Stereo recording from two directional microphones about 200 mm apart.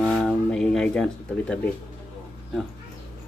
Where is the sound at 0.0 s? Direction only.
5° left (ahead or behind).